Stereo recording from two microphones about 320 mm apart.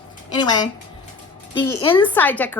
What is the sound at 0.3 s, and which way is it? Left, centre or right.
A woman's voice, centre.